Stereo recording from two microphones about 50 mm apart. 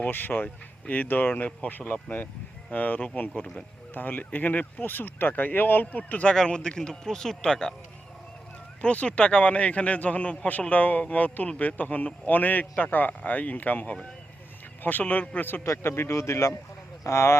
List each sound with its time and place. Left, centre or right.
0.1 s speech: left
6.3 s speech: centre
8.8 s a man's voice: left
15.6 s speech: left